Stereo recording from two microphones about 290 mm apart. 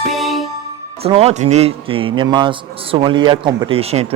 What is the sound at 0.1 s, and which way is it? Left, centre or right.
Music, centre.